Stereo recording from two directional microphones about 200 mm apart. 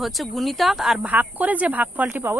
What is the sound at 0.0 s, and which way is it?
Speech, centre (ahead or behind).